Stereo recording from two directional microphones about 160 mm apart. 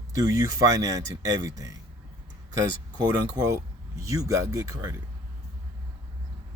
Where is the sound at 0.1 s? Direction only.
20° right (ahead or behind).